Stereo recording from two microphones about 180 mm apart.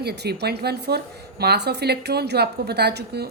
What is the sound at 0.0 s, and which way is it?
Speech, 65° right (ahead or behind).